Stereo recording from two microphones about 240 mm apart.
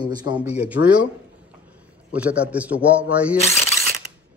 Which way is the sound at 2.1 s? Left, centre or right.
Centre.